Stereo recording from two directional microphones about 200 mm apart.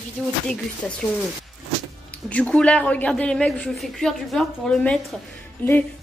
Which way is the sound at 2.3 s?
5° left (ahead or behind).